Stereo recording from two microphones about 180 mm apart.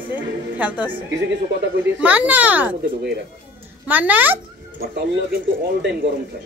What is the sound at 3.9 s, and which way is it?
Speech, 10° right (ahead or behind).